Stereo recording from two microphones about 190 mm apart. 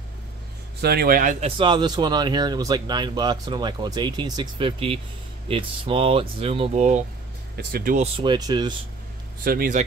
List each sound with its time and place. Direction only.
0.7 s speech: 55° right (ahead or behind)
1.6 s speech: 25° right (ahead or behind); by 7.1 s 40° right (ahead or behind)
7.5 s speech: 50° right (ahead or behind)
8.0 s speech: 25° right (ahead or behind)
9.4 s speech: 50° right (ahead or behind)